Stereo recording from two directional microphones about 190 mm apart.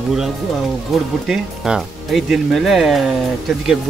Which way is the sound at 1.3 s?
Centre (ahead or behind).